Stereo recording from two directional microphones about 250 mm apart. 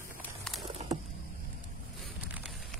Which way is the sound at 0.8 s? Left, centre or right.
Right.